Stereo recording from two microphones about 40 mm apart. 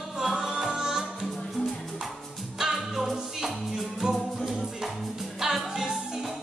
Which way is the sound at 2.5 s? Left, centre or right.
Centre.